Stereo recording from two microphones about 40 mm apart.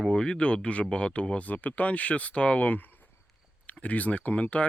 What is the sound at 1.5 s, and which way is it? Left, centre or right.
Speech, left.